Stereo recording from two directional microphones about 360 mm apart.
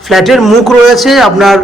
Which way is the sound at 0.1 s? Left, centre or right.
Centre.